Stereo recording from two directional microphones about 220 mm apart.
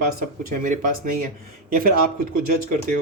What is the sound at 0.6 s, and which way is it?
Speech, 35° right (ahead or behind).